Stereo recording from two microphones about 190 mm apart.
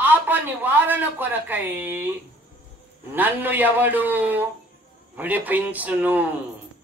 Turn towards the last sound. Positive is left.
turn(degrees=-10)  # may be behind; listen again after turning